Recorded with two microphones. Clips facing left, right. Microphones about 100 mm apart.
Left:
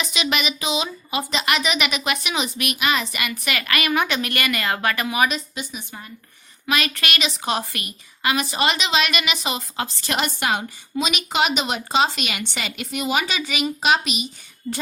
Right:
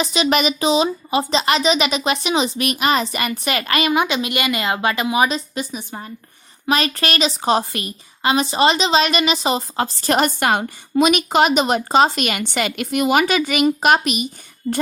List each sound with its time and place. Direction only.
0.0 s speech: 35° right (ahead or behind)
5.5 s a woman's voice: 35° right (ahead or behind)
14.6 s speech: 30° right (ahead or behind)